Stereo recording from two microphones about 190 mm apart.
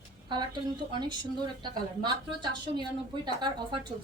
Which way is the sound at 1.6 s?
25° right (ahead or behind).